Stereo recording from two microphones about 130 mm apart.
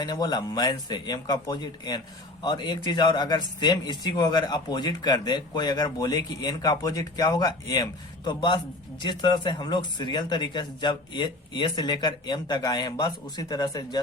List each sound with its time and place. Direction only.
0.0 s a man's voice: 30° left (ahead or behind)